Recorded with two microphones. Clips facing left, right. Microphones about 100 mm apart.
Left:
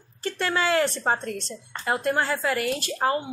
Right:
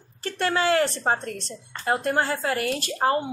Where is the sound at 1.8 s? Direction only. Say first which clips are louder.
Right 1 dB; 35° right (ahead or behind).